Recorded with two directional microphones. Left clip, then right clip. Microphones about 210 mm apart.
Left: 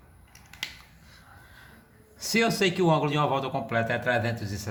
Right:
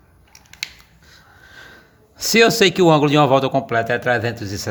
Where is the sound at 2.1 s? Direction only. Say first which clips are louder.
Right 11 dB; 45° right (ahead or behind).